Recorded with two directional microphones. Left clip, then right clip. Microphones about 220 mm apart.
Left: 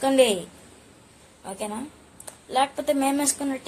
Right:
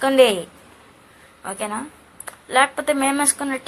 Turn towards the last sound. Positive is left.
turn(degrees=5)  # may be behind; listen again after turning